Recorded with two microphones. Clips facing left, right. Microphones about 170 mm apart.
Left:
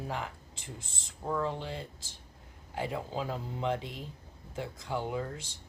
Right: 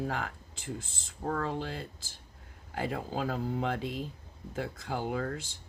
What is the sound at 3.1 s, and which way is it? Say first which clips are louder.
Speech: right 3 dB; 65° right (ahead or behind).